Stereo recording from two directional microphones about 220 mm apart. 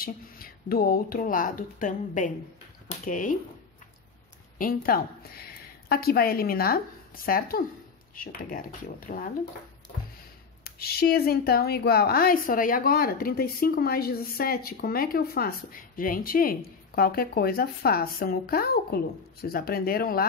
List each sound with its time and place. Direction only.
0.0 s speech: 40° left (ahead or behind)
4.6 s a woman's voice: 40° left (ahead or behind)
10.6 s a woman's voice: 45° left (ahead or behind)